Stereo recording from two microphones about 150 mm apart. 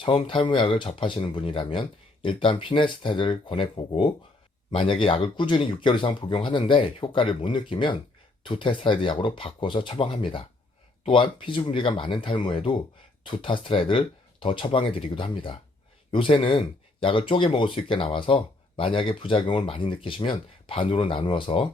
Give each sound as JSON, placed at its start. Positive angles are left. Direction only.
{"t": 0.0, "sound": "speech", "side_deg": 35}